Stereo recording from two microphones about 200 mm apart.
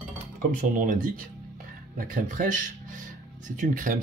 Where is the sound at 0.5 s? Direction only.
40° right (ahead or behind).